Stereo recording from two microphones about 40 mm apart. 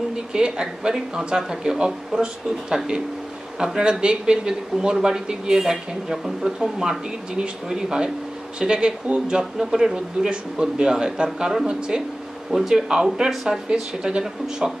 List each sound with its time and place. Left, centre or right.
0.1 s a woman's voice: right
3.5 s speech: centre